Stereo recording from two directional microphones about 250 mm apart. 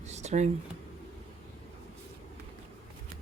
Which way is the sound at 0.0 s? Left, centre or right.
Right.